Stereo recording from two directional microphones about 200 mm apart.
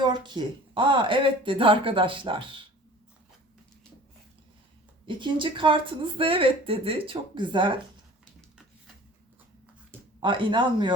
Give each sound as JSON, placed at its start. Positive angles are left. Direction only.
{"t": 0.0, "sound": "speech", "side_deg": -20}
{"t": 5.0, "sound": "speech", "side_deg": -25}
{"t": 10.2, "sound": "speech", "side_deg": -25}